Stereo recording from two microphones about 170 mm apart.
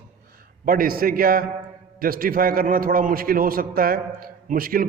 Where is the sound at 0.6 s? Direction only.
55° right (ahead or behind).